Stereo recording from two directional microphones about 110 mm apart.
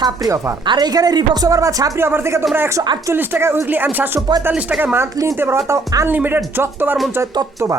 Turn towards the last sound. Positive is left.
turn(degrees=-20)  # may be behind; listen again after turning